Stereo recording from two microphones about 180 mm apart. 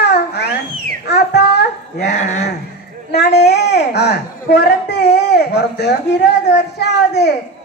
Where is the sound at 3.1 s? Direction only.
70° left (ahead or behind).